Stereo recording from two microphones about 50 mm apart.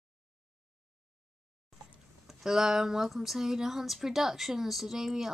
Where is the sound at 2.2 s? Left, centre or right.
Centre.